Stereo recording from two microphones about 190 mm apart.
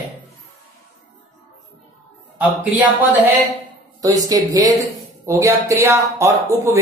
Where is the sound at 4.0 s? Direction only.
20° right (ahead or behind).